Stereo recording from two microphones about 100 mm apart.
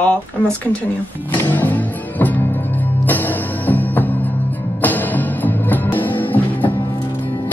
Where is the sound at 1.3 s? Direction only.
15° left (ahead or behind).